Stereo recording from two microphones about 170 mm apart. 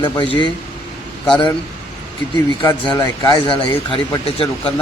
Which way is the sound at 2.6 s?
25° left (ahead or behind).